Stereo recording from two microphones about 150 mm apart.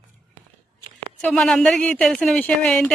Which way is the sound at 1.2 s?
5° left (ahead or behind).